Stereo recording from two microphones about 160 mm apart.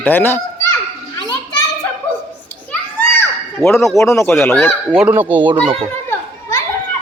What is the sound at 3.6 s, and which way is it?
Speech, 20° right (ahead or behind).